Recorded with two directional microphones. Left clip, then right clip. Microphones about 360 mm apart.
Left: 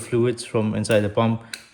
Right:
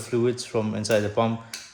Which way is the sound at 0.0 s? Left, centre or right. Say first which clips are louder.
Left 2 dB; left.